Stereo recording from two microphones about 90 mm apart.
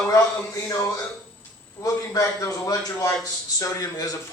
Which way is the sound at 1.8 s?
35° left (ahead or behind).